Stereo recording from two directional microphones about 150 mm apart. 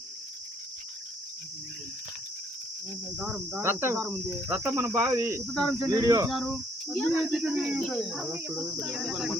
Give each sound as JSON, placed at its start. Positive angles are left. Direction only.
{"t": 3.2, "sound": "speech", "side_deg": -5}
{"t": 3.9, "sound": "speech", "side_deg": 0}
{"t": 4.4, "sound": "speech", "side_deg": -15}
{"t": 5.5, "sound": "speech", "side_deg": 0}
{"t": 5.9, "sound": "speech", "side_deg": -25}
{"t": 6.3, "sound": "speech", "side_deg": 0}
{"t": 8.3, "sound": "speech", "side_deg": -15}
{"t": 8.9, "sound": "speech", "side_deg": 0}